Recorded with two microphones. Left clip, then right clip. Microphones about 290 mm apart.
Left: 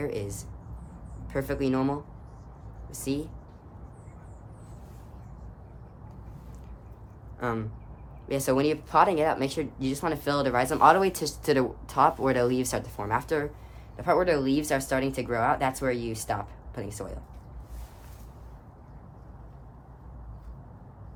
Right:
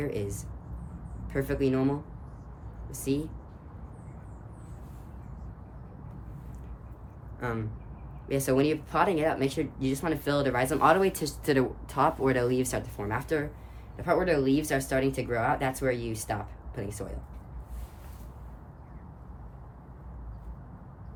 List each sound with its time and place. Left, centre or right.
0.0 s speech: centre
7.3 s speech: centre